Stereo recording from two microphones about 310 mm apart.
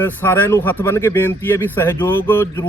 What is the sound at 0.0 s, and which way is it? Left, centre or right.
Speech, centre.